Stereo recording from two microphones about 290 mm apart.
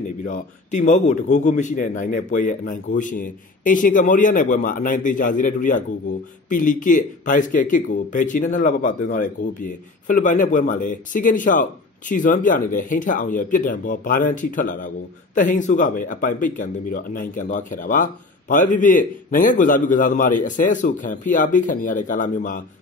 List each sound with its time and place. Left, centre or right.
0.2 s speech: left